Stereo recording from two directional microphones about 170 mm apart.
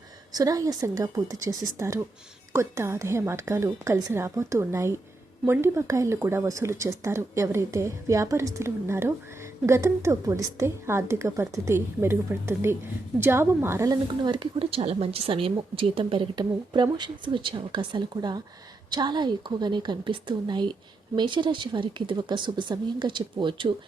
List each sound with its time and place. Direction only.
0.3 s a woman's voice: 20° right (ahead or behind)